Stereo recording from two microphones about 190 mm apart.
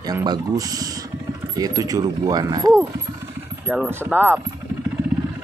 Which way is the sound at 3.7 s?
10° right (ahead or behind).